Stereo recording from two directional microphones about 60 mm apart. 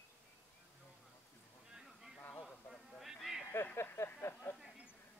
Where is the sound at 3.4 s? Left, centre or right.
Left.